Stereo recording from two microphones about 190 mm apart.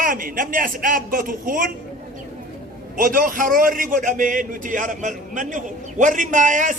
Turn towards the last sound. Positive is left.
turn(degrees=-40)  # may be behind; listen again after turning